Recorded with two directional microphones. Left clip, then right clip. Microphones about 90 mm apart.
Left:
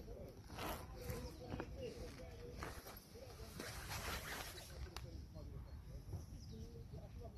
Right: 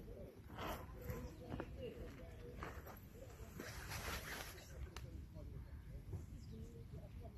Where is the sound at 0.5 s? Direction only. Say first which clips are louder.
Even; centre (ahead or behind).